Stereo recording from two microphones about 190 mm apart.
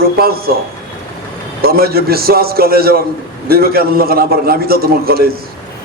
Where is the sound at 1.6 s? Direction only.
55° right (ahead or behind).